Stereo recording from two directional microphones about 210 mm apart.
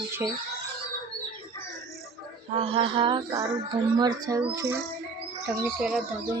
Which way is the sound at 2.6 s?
25° right (ahead or behind).